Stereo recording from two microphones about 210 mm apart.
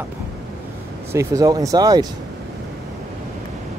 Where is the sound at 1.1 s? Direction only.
15° right (ahead or behind).